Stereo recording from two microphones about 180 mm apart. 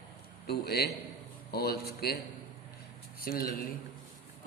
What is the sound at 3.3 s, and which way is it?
Speech, 55° left (ahead or behind).